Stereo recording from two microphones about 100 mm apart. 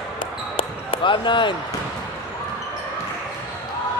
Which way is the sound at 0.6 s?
60° left (ahead or behind).